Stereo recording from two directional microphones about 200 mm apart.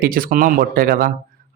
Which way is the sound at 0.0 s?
45° right (ahead or behind).